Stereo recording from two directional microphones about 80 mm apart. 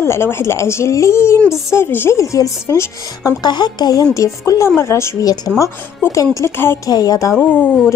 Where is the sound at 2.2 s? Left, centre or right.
Left.